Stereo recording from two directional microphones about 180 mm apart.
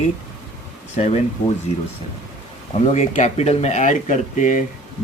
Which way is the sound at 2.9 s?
40° left (ahead or behind).